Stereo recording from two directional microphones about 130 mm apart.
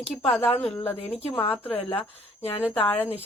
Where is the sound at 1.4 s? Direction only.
45° left (ahead or behind).